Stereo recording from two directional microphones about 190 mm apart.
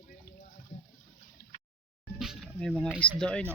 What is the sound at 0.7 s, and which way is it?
Water, 60° left (ahead or behind).